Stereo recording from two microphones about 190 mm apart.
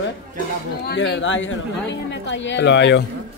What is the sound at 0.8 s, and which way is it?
Speech, 65° left (ahead or behind).